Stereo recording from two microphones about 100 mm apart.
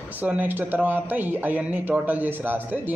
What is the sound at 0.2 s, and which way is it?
A man's voice, 15° right (ahead or behind).